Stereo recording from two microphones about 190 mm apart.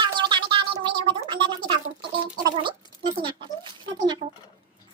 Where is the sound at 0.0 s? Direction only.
25° right (ahead or behind).